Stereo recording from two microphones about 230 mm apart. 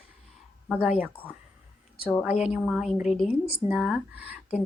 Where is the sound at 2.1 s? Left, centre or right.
Centre.